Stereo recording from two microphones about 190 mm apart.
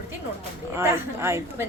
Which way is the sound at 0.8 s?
15° right (ahead or behind).